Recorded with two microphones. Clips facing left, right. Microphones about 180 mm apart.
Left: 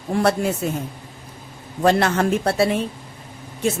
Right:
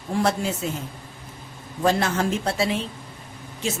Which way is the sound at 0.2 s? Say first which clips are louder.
Left 4 dB; 60° left (ahead or behind).